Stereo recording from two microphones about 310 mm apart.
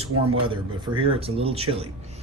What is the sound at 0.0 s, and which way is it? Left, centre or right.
A man's voice, centre.